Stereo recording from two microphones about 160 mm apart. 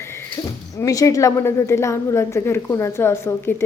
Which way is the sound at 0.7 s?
20° left (ahead or behind).